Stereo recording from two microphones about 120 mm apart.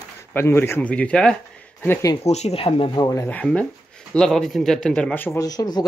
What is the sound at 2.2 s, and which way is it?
Speech, 65° left (ahead or behind).